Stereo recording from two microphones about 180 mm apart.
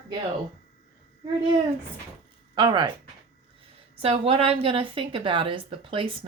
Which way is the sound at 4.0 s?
35° right (ahead or behind).